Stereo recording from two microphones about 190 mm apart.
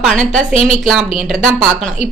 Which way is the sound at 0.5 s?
30° left (ahead or behind).